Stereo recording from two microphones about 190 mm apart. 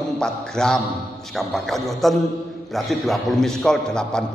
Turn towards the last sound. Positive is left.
turn(degrees=5)  # may be behind; listen again after turning